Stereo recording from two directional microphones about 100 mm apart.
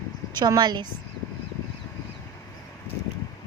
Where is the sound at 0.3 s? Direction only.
45° right (ahead or behind).